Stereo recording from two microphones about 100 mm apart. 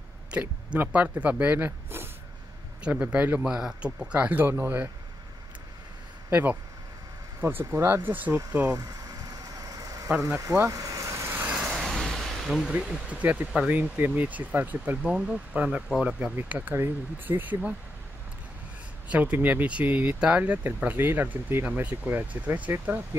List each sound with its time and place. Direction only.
0.3 s speech: 15° right (ahead or behind)
6.3 s speech: 20° right (ahead or behind)
8.6 s vehicle: 35° right (ahead or behind)
11.5 s vehicle: 10° right (ahead or behind)
11.9 s speech: 5° left (ahead or behind)
16.3 s speech: 15° right (ahead or behind)
19.0 s speech: 15° right (ahead or behind)